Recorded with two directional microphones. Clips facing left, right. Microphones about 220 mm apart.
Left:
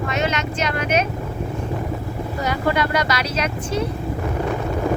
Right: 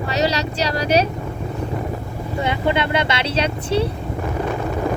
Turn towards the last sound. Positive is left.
turn(degrees=-30)  # may be behind; listen again after turning